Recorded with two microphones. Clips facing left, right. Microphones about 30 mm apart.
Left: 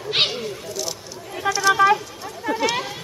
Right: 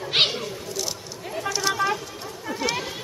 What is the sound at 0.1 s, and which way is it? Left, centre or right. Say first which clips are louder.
Cat: even; centre.